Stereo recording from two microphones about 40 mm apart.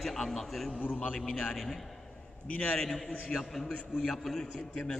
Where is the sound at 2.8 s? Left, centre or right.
Centre.